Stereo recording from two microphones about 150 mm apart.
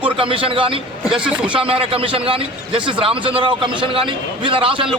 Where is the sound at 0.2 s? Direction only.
35° right (ahead or behind).